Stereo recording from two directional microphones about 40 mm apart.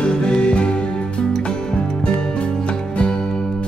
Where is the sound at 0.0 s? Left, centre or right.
Left.